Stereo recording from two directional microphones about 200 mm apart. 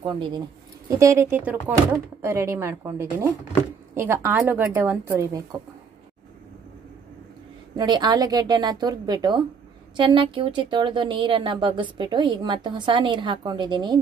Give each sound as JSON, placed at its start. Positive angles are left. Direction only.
{"t": 0.0, "sound": "a woman's voice", "side_deg": -25}
{"t": 7.7, "sound": "a woman's voice", "side_deg": -20}